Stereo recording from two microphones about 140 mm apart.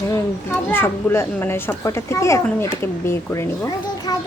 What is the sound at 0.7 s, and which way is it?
A child's voice, 15° left (ahead or behind).